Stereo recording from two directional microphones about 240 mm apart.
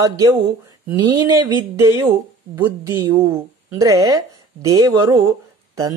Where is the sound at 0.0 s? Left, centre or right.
Centre.